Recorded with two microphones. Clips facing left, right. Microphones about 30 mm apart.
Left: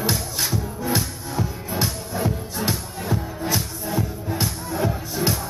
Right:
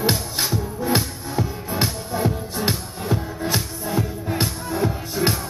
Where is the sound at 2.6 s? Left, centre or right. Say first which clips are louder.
Right 2 dB; centre.